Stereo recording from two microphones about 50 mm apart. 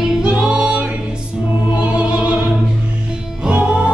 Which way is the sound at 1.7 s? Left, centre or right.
Right.